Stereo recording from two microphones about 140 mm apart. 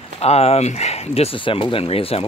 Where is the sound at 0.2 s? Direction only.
45° left (ahead or behind).